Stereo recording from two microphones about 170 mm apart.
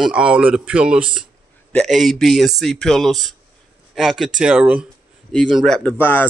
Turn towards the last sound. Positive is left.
turn(degrees=10)  # may be behind; listen again after turning